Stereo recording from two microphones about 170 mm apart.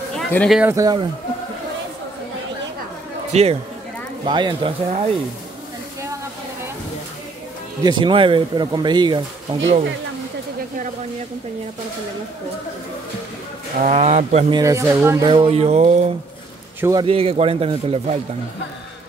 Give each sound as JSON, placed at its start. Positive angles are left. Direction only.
{"t": 0.1, "sound": "a sound", "side_deg": 5}
{"t": 0.6, "sound": "speech", "side_deg": -15}
{"t": 3.3, "sound": "speech", "side_deg": -40}
{"t": 4.3, "sound": "speech", "side_deg": -25}
{"t": 7.8, "sound": "speech", "side_deg": -25}
{"t": 13.7, "sound": "speech", "side_deg": -45}
{"t": 14.5, "sound": "speech", "side_deg": -20}
{"t": 15.2, "sound": "speech", "side_deg": -30}